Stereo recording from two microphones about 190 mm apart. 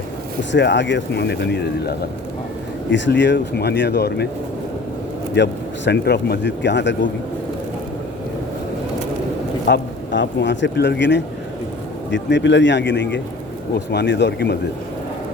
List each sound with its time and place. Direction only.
0.5 s speech: 65° left (ahead or behind)
5.3 s speech: 65° left (ahead or behind)
9.6 s speech: 65° left (ahead or behind)